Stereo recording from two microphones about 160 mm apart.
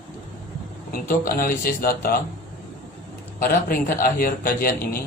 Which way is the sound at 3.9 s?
65° left (ahead or behind).